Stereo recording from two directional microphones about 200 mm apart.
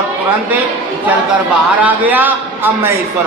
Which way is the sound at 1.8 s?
10° right (ahead or behind).